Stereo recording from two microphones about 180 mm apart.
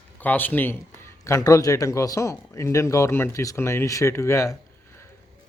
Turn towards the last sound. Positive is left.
turn(degrees=15)  # may be behind; listen again after turning